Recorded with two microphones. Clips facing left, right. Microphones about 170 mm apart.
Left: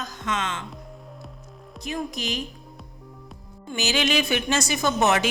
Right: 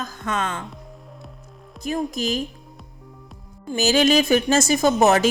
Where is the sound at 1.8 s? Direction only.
45° right (ahead or behind).